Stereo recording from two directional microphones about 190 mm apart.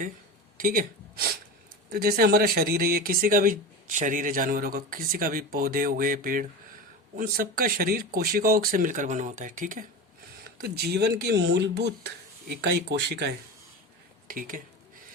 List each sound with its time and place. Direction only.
0.5 s a sound: 50° right (ahead or behind)
1.9 s speech: 55° right (ahead or behind)
10.6 s speech: 55° right (ahead or behind)
14.3 s speech: 45° right (ahead or behind)